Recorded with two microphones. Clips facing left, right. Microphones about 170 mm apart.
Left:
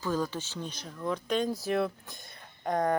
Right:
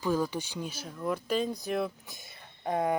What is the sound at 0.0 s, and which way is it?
Speech, 10° right (ahead or behind).